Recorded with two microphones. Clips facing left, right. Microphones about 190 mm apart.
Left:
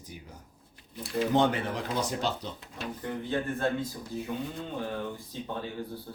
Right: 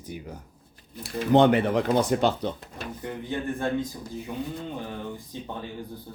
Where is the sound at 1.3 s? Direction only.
65° right (ahead or behind).